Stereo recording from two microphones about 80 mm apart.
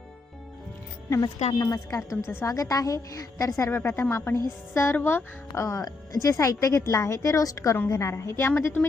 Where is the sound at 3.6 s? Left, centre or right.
Left.